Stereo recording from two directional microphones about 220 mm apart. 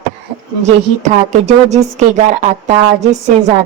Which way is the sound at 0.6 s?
30° right (ahead or behind).